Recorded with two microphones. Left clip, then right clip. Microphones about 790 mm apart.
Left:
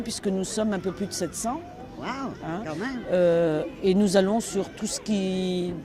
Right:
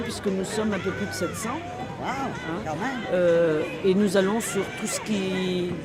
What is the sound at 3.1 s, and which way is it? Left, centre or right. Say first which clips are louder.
Speech: even; left.